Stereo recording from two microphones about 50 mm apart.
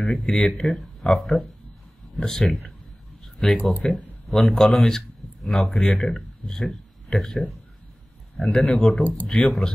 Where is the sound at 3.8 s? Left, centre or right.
Centre.